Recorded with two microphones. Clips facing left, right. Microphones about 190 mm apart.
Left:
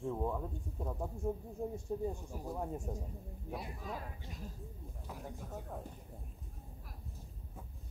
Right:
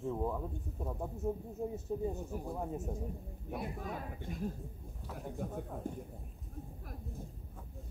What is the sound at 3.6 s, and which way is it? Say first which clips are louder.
Speech: right 3 dB; 55° right (ahead or behind).